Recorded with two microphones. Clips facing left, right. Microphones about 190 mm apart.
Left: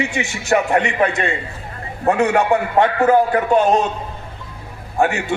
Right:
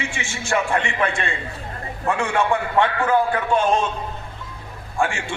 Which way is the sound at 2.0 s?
40° left (ahead or behind).